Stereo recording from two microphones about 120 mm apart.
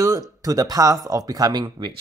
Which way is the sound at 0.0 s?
30° right (ahead or behind).